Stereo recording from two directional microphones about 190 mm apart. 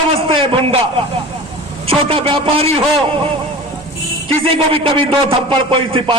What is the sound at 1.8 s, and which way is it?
Speech, 30° right (ahead or behind).